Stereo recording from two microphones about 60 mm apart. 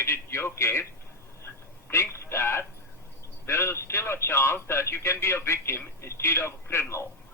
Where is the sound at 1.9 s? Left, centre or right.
Left.